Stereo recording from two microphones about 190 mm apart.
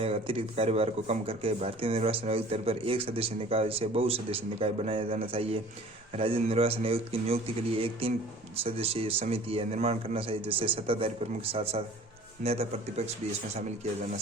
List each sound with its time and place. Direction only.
0.0 s speech: 30° right (ahead or behind)